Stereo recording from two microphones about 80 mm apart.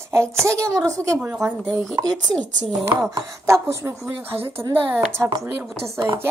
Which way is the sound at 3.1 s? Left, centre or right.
Right.